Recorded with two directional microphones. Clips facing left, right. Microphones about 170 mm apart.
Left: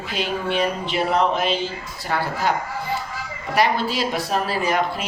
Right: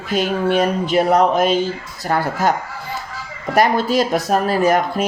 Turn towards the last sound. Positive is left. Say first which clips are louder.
# right 6 dB
turn(degrees=-45)  # may be behind; listen again after turning